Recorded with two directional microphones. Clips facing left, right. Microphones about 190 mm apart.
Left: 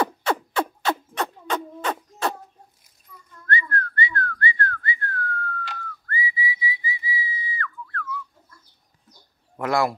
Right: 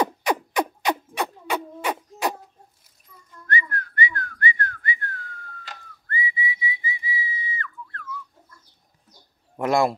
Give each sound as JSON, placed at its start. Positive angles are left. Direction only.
{"t": 0.0, "sound": "a sound", "side_deg": -15}
{"t": 3.4, "sound": "whistling", "side_deg": -15}
{"t": 9.6, "sound": "speech", "side_deg": -25}